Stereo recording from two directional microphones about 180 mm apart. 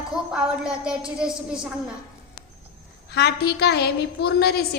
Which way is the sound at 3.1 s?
65° left (ahead or behind).